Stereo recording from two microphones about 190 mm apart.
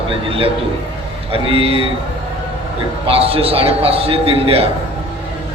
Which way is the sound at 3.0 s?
30° right (ahead or behind).